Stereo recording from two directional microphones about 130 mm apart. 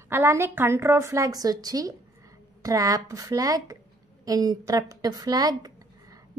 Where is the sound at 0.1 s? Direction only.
20° right (ahead or behind).